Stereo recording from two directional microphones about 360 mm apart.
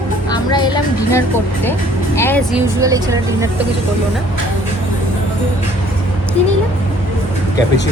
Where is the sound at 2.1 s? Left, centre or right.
Centre.